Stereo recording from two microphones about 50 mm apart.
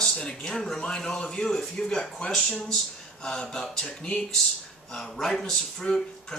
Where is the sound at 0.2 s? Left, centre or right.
Centre.